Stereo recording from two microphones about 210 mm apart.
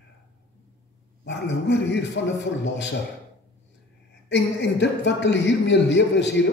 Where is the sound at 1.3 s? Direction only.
60° left (ahead or behind).